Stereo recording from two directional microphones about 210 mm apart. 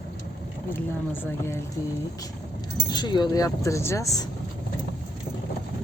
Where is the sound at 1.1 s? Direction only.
10° left (ahead or behind).